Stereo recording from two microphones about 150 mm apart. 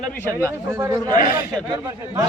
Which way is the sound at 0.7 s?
20° right (ahead or behind).